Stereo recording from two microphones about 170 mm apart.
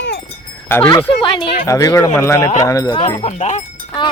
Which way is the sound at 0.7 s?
10° left (ahead or behind).